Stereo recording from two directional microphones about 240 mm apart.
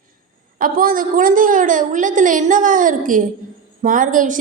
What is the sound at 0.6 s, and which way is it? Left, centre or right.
A woman's voice, right.